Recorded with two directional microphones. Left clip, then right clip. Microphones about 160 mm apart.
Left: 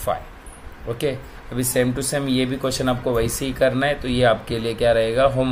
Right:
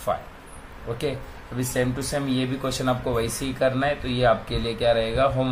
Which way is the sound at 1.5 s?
40° left (ahead or behind).